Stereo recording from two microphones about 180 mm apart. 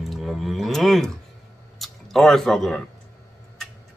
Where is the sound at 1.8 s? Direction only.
Centre (ahead or behind).